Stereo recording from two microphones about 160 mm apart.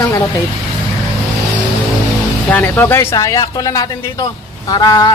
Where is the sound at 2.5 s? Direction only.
10° left (ahead or behind).